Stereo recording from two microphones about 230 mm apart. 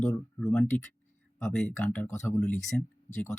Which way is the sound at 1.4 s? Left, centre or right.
Centre.